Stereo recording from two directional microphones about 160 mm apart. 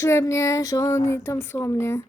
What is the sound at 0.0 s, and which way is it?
Speech, 15° left (ahead or behind).